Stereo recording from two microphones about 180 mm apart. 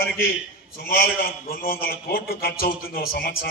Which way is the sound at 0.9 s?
55° left (ahead or behind).